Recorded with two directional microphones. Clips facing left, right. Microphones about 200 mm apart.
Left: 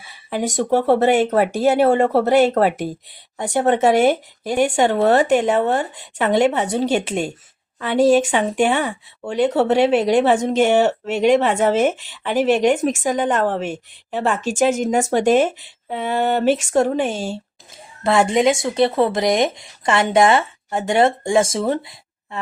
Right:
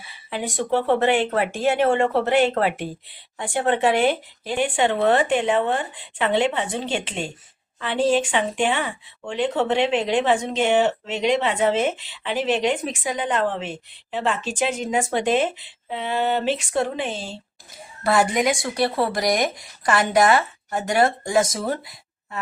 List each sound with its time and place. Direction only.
0.3 s speech: 45° left (ahead or behind)
18.0 s speech: 25° left (ahead or behind)